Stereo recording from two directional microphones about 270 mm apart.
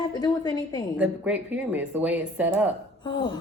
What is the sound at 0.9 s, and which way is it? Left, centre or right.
Speech, centre.